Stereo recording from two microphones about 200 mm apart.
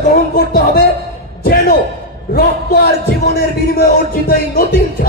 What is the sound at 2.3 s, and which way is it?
Music, 50° left (ahead or behind).